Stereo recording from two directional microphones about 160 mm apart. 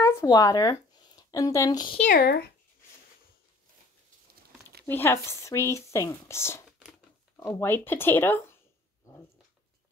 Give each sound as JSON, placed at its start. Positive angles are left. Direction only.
{"t": 0.0, "sound": "speech", "side_deg": 20}
{"t": 2.1, "sound": "speech", "side_deg": 70}
{"t": 4.8, "sound": "speech", "side_deg": 15}